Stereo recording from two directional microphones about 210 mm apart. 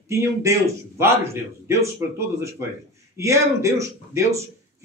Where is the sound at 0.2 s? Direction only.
15° right (ahead or behind).